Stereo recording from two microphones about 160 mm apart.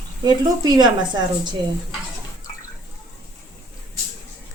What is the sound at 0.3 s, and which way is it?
Speech, 25° right (ahead or behind).